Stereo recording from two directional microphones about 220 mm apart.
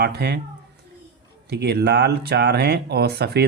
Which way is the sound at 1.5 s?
45° right (ahead or behind).